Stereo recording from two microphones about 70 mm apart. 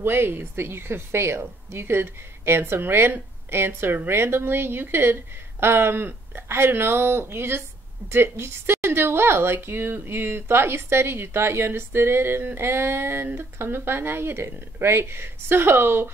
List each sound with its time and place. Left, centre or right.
0.0 s a woman's voice: right